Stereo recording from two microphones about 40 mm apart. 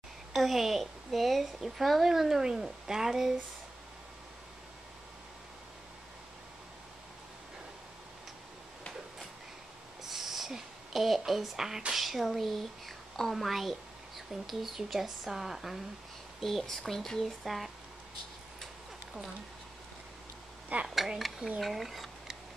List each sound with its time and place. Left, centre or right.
0.3 s a woman's voice: centre
10.0 s a sound: centre
11.9 s a woman's voice: centre
16.3 s speech: centre
20.7 s speech: right
21.2 s speech: centre